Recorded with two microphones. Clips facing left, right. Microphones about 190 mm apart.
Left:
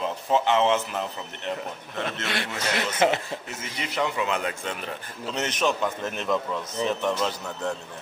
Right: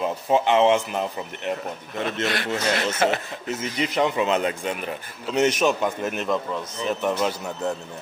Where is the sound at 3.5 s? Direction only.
20° right (ahead or behind).